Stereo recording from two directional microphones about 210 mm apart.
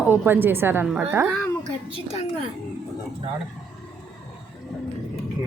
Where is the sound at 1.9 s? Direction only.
25° left (ahead or behind).